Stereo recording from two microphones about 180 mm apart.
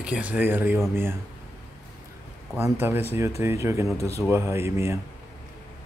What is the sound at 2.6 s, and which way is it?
Speech, 10° right (ahead or behind).